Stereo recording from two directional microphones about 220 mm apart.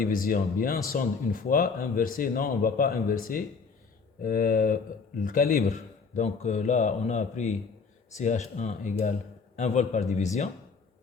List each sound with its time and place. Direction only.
0.1 s speech: 40° left (ahead or behind)